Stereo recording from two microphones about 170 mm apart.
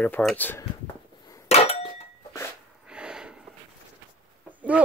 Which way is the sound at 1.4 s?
35° left (ahead or behind).